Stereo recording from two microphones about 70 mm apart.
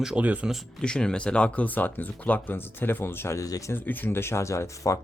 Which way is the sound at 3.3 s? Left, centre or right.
Left.